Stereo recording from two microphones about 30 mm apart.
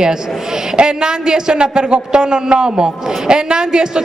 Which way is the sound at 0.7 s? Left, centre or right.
Right.